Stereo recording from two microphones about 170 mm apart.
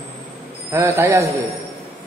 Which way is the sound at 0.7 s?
15° right (ahead or behind).